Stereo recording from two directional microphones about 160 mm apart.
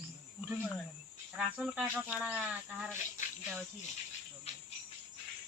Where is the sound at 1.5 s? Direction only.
5° right (ahead or behind).